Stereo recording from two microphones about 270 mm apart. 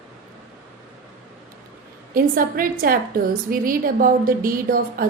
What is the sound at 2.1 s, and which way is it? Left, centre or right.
Speech, right.